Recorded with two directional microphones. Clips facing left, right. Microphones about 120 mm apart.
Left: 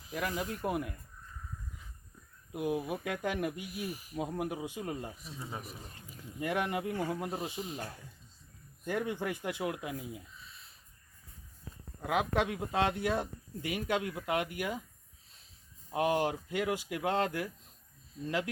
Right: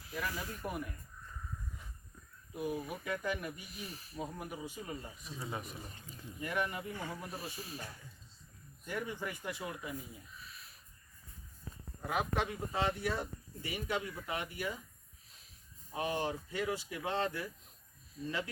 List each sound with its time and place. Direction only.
0.0 s speech: 20° left (ahead or behind)
0.6 s speech: 90° left
2.5 s speech: 90° left
3.7 s speech: 10° left (ahead or behind)
4.2 s speech: 90° left
5.2 s speech: centre (ahead or behind)
6.4 s speech: 85° left
7.3 s speech: 20° left (ahead or behind)
8.9 s speech: 85° left
10.4 s crow: 25° left (ahead or behind)
12.0 s speech: 90° left
15.9 s speech: 70° left (ahead or behind)